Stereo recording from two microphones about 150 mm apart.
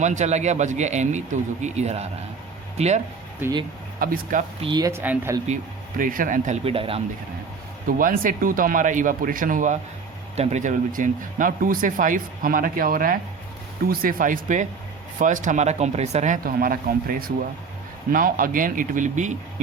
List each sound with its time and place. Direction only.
0.0 s speech: 50° right (ahead or behind)
4.0 s speech: 70° right (ahead or behind)
4.6 s speech: 30° right (ahead or behind)
4.9 s speech: 15° right (ahead or behind)
6.0 s speech: 65° right (ahead or behind)
6.7 s speech: 40° right (ahead or behind)
7.9 s speech: 65° right (ahead or behind)
10.3 s speech: 50° right (ahead or behind)